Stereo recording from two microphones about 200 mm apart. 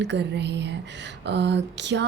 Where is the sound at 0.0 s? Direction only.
60° right (ahead or behind).